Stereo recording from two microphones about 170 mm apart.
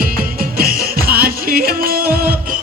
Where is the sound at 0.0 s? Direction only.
60° right (ahead or behind).